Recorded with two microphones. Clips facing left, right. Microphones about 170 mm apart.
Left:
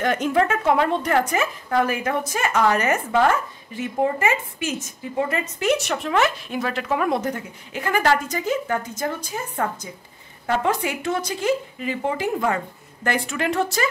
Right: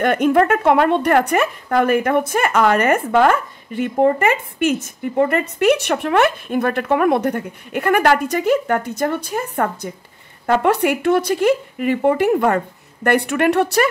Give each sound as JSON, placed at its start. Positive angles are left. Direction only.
{"t": 0.0, "sound": "a woman's voice", "side_deg": -60}